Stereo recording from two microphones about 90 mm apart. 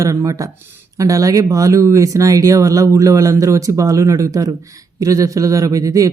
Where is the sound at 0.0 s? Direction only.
35° right (ahead or behind).